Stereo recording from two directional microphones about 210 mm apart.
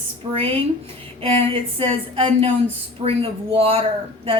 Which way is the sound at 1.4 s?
25° right (ahead or behind).